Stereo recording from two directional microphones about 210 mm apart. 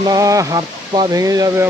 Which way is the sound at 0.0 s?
15° right (ahead or behind).